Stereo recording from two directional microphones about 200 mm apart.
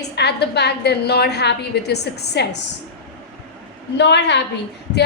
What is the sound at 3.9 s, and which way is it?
Speech, 60° left (ahead or behind).